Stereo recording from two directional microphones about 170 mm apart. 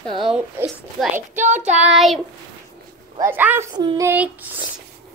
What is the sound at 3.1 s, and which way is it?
Speech, 15° right (ahead or behind).